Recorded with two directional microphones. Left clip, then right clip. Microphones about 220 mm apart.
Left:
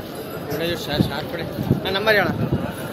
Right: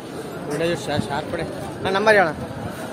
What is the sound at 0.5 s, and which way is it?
Speech, 35° right (ahead or behind).